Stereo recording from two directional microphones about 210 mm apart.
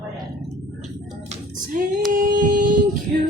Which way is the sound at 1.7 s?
40° right (ahead or behind).